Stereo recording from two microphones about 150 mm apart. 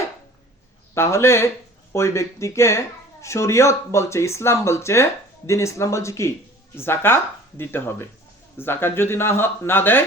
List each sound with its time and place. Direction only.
0.9 s speech: 15° left (ahead or behind)